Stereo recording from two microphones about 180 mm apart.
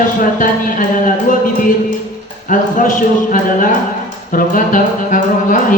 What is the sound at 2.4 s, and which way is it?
Speech, 45° left (ahead or behind).